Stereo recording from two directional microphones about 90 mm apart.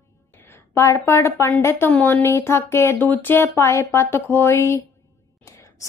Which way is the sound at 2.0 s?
25° left (ahead or behind).